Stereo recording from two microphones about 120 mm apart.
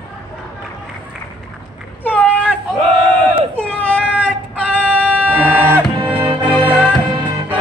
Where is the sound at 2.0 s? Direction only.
10° left (ahead or behind).